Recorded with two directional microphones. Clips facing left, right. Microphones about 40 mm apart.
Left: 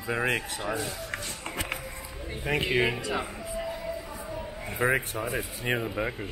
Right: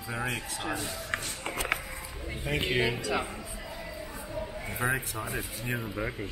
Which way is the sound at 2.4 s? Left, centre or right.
Left.